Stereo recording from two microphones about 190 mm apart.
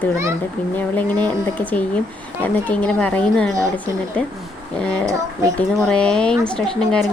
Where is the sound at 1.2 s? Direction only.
10° left (ahead or behind).